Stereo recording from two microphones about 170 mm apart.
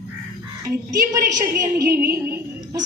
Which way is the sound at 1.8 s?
65° right (ahead or behind).